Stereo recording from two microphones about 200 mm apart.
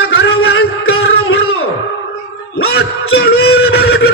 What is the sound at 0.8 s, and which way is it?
Music, 90° left.